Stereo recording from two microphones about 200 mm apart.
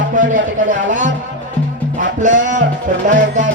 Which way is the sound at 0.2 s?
40° right (ahead or behind).